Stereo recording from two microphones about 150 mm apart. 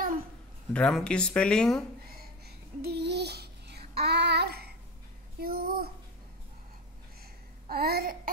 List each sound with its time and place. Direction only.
0.7 s speech: 5° left (ahead or behind)
2.1 s babbling: 90° right
7.6 s babbling: 90° right